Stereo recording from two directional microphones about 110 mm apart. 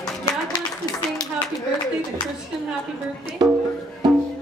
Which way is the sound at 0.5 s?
40° left (ahead or behind).